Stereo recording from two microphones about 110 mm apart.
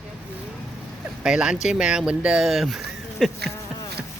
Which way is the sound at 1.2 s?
5° right (ahead or behind).